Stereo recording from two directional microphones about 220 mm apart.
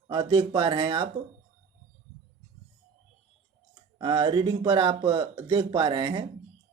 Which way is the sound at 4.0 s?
20° right (ahead or behind).